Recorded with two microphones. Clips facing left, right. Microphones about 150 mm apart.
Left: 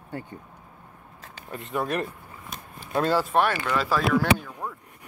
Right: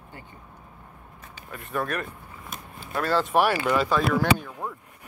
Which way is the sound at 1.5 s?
20° left (ahead or behind).